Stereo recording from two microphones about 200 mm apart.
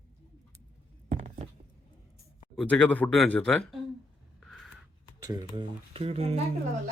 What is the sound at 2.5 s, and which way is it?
Speech, 5° left (ahead or behind).